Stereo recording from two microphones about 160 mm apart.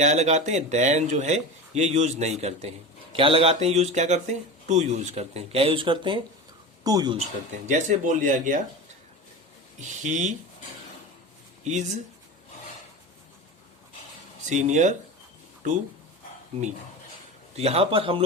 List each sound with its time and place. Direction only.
0.0 s speech: 45° right (ahead or behind); by 7.2 s 25° right (ahead or behind)
7.7 s speech: 50° right (ahead or behind)
9.8 s speech: 50° right (ahead or behind)
11.6 s speech: 45° right (ahead or behind)
14.5 s speech: 50° right (ahead or behind)
17.6 s a man's voice: 40° right (ahead or behind)